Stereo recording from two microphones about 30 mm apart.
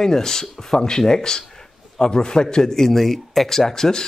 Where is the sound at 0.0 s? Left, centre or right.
Centre.